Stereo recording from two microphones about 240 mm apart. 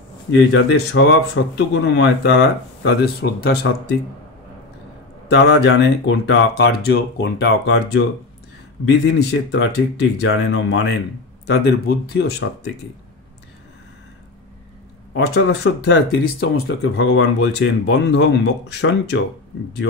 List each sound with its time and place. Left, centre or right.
0.5 s speech: left
5.5 s speech: left
15.1 s speech: left